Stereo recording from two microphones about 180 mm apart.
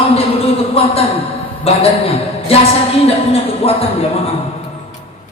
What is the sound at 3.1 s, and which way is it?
Speech, 35° left (ahead or behind).